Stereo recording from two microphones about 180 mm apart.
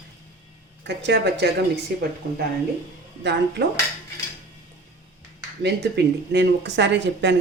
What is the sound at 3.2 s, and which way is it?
Speech, 70° right (ahead or behind).